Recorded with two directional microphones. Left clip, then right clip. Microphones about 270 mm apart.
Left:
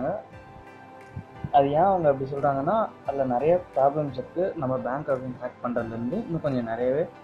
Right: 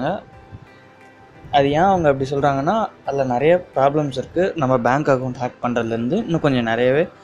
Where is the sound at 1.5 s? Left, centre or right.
Right.